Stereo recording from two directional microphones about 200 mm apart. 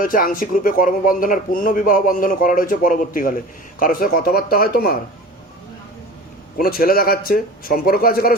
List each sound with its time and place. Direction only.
0.0 s speech: 45° left (ahead or behind)
6.6 s speech: 45° left (ahead or behind)